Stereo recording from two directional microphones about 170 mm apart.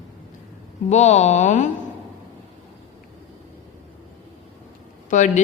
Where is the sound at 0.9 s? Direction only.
40° left (ahead or behind).